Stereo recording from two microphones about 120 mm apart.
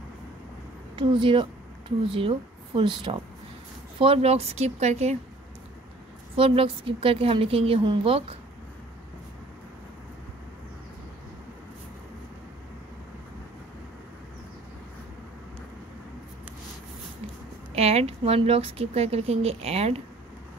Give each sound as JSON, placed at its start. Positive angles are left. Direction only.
{"t": 0.9, "sound": "speech", "side_deg": -45}
{"t": 4.0, "sound": "speech", "side_deg": -55}
{"t": 6.3, "sound": "a woman's voice", "side_deg": -50}
{"t": 17.7, "sound": "speech", "side_deg": -60}